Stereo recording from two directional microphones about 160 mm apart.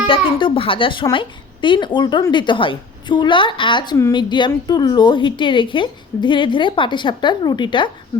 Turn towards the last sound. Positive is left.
turn(degrees=30)  # may be behind; listen again after turning